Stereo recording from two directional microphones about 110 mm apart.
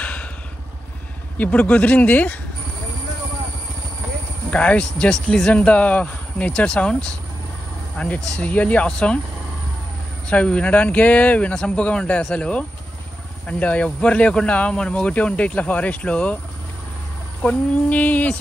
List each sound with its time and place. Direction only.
0.0 s vehicle: 10° left (ahead or behind)
1.4 s a man's voice: 10° left (ahead or behind)
4.5 s a man's voice: 10° left (ahead or behind)
10.3 s a man's voice: 10° left (ahead or behind)
17.4 s a man's voice: 10° left (ahead or behind)